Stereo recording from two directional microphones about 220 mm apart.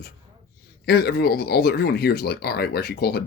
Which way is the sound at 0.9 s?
45° left (ahead or behind).